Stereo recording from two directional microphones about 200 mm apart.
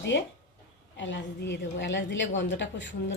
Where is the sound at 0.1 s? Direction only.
65° left (ahead or behind).